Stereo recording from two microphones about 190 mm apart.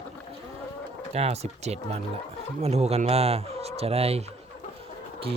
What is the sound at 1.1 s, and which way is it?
Speech, 35° right (ahead or behind).